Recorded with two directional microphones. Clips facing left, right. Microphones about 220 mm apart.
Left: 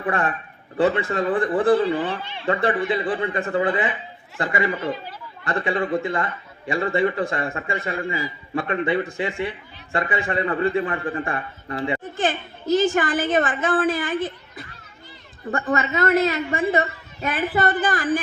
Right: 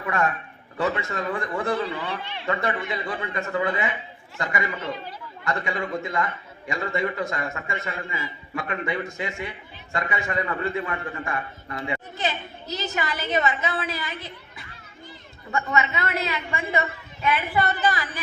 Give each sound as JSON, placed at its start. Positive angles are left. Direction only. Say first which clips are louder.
{"t": 0.0, "sound": "a man's voice", "louder": "left 2 dB", "side_deg": 30}
{"t": 12.1, "sound": "a woman's voice", "louder": "left 5 dB", "side_deg": 50}
{"t": 15.7, "sound": "a man's voice", "louder": "left 3 dB", "side_deg": 35}
{"t": 16.0, "sound": "a woman's voice", "louder": "left 9 dB", "side_deg": 50}